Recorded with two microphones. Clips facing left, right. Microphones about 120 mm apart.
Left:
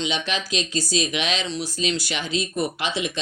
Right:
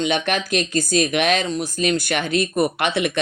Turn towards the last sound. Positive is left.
turn(degrees=-60)  # may be behind; listen again after turning